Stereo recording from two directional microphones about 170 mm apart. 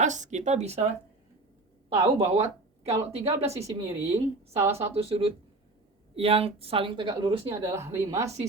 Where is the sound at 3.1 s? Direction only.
35° right (ahead or behind).